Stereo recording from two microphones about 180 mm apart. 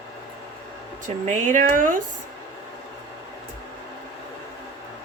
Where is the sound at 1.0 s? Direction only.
45° right (ahead or behind).